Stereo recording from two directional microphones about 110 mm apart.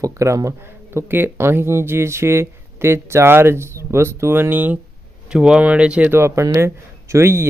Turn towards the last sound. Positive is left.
turn(degrees=-25)  # may be behind; listen again after turning